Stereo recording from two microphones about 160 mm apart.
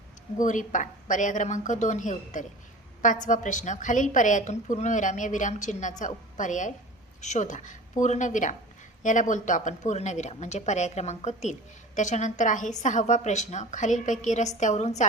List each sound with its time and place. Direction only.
0.3 s a woman's voice: 55° left (ahead or behind)